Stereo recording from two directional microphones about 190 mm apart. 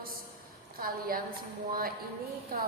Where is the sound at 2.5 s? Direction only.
50° right (ahead or behind).